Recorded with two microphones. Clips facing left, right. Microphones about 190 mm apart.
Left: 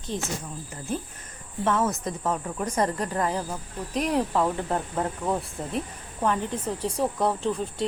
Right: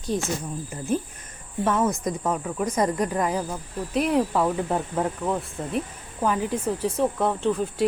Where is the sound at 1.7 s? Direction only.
15° right (ahead or behind).